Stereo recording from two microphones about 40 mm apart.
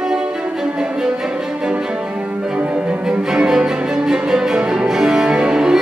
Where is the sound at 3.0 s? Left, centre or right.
Centre.